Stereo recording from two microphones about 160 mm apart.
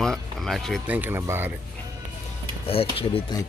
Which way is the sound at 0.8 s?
10° right (ahead or behind).